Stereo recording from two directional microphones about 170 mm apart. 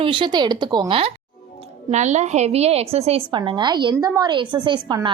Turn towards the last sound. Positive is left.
turn(degrees=-25)  # may be behind; listen again after turning